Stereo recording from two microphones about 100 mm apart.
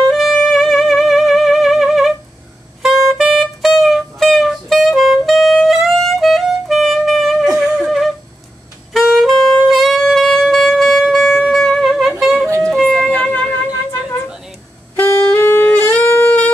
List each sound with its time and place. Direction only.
0.1 s music: centre (ahead or behind)
8.9 s saxophone: centre (ahead or behind)
12.2 s music: centre (ahead or behind)
13.7 s music: 30° left (ahead or behind)
15.0 s wind instrument: 20° left (ahead or behind)